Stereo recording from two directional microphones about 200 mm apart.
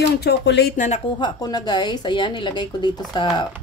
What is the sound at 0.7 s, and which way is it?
Speech, 35° left (ahead or behind).